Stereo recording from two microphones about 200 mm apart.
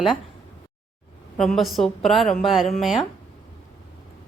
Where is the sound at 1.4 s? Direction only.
Centre (ahead or behind).